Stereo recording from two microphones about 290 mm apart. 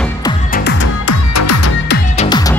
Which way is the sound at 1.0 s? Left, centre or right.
Left.